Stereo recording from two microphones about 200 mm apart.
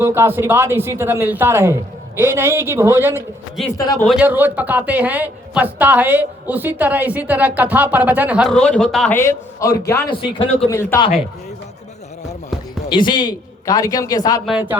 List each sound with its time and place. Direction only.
0.0 s a woman's voice: 10° right (ahead or behind)
3.8 s a man's voice: 20° left (ahead or behind)
4.2 s a woman's voice: 10° right (ahead or behind); by 10.4 s 25° left (ahead or behind)
10.7 s a man's voice: 15° left (ahead or behind)
12.9 s a man's voice: 20° left (ahead or behind)
14.4 s speech: 5° right (ahead or behind)